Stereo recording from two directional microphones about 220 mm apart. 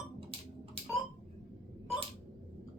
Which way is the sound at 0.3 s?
25° right (ahead or behind).